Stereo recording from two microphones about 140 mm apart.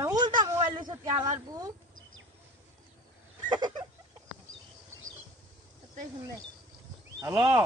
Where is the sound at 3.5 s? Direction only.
30° right (ahead or behind).